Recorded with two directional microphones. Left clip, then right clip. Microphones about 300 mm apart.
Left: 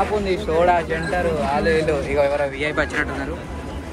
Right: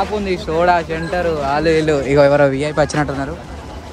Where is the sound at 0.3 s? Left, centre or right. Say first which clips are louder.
Right 4 dB; right.